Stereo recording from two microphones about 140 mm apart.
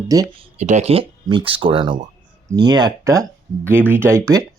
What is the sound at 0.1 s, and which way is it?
Speech, 25° right (ahead or behind).